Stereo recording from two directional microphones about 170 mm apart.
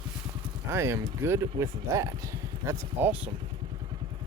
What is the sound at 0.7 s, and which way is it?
Speech, 15° right (ahead or behind).